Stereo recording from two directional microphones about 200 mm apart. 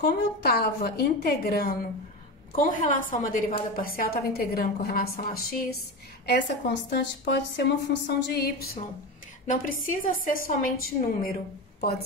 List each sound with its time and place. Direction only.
0.0 s a woman's voice: 50° left (ahead or behind)
6.2 s a woman's voice: 60° left (ahead or behind)